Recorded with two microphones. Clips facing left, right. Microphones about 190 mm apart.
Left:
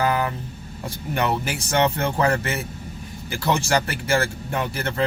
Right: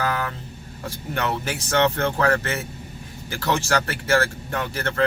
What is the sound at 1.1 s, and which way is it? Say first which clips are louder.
Speech: left 2 dB; 15° left (ahead or behind).